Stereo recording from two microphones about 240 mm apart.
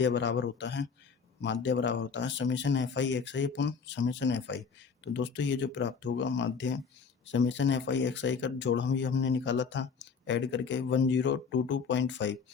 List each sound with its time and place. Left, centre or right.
0.0 s speech: left